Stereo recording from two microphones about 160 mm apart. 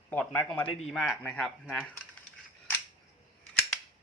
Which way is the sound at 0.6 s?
35° left (ahead or behind).